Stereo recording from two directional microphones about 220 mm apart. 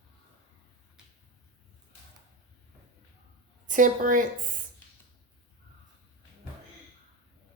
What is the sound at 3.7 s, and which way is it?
Speech, 35° right (ahead or behind).